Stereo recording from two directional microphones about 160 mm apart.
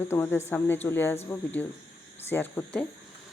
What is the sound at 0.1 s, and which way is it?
Speech, 15° left (ahead or behind).